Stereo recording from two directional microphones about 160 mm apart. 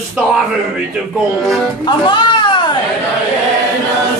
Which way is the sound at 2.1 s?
30° left (ahead or behind).